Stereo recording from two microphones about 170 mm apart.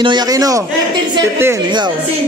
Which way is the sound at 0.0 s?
25° right (ahead or behind).